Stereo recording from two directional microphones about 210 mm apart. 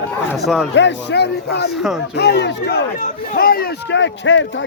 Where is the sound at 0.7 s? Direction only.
55° left (ahead or behind).